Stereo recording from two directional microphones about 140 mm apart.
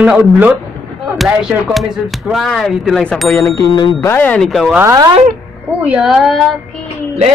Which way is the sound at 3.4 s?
25° left (ahead or behind).